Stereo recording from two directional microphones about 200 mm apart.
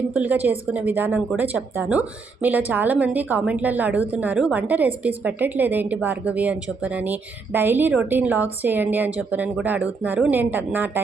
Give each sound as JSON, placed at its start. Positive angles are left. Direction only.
{"t": 0.1, "sound": "a woman's voice", "side_deg": -5}